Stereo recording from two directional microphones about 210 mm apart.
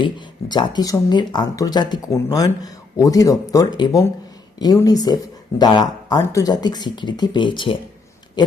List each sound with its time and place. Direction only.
0.0 s speech: 20° left (ahead or behind)
8.4 s owl: 20° left (ahead or behind)